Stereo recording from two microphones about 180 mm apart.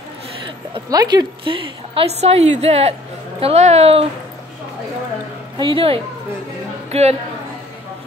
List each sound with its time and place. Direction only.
0.7 s a woman's voice: 20° right (ahead or behind)
5.6 s a woman's voice: 30° right (ahead or behind)